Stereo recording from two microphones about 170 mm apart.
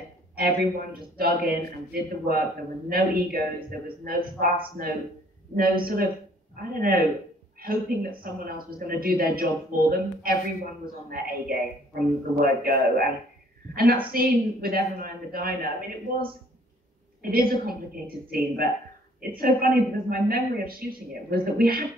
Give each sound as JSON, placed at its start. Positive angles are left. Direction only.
{"t": 0.4, "sound": "a man's voice", "side_deg": -55}
{"t": 17.2, "sound": "a man's voice", "side_deg": -60}